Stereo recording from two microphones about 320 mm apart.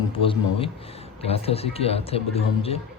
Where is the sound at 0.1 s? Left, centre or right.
Centre.